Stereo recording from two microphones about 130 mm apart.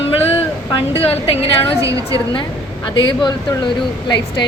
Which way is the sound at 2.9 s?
35° left (ahead or behind).